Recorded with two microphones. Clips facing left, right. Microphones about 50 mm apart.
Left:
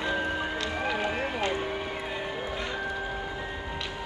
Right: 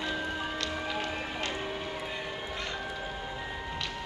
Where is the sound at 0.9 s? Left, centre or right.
Centre.